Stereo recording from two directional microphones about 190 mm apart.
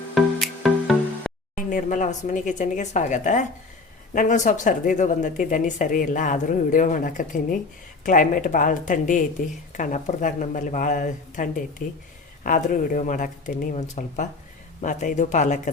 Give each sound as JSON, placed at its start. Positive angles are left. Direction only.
{"t": 0.1, "sound": "music", "side_deg": 0}
{"t": 1.5, "sound": "a woman's voice", "side_deg": 45}